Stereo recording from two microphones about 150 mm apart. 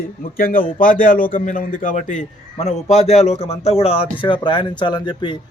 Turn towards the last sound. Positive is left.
turn(degrees=30)  # may be behind; listen again after turning